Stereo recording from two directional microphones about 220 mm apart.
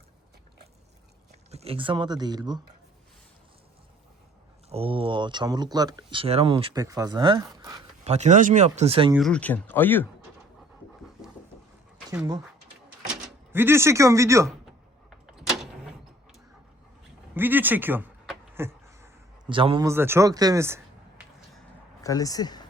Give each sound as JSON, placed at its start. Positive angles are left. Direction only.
{"t": 1.5, "sound": "speech", "side_deg": -25}
{"t": 4.7, "sound": "speech", "side_deg": -25}
{"t": 8.0, "sound": "speech", "side_deg": -30}
{"t": 9.1, "sound": "speech", "side_deg": 5}
{"t": 12.1, "sound": "speech", "side_deg": -10}
{"t": 13.5, "sound": "speech", "side_deg": -10}
{"t": 15.4, "sound": "vehicle", "side_deg": 0}
{"t": 17.3, "sound": "speech", "side_deg": -10}
{"t": 18.5, "sound": "a sound", "side_deg": -10}
{"t": 19.9, "sound": "speech", "side_deg": -10}
{"t": 22.0, "sound": "speech", "side_deg": 15}